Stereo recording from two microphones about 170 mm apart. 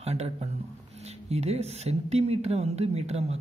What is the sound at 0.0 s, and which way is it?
Speech, 40° right (ahead or behind).